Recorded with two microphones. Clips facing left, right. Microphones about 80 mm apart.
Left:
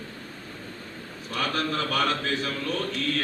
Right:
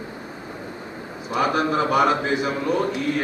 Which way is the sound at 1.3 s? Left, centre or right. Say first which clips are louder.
Right 7 dB; centre.